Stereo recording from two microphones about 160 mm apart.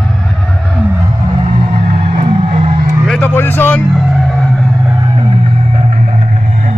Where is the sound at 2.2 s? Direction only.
40° right (ahead or behind).